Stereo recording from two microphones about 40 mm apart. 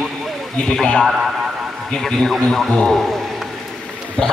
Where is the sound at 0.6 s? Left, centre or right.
Centre.